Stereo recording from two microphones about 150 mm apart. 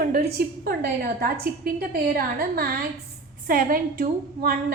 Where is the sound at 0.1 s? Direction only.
90° right; by 4.0 s 75° right (ahead or behind).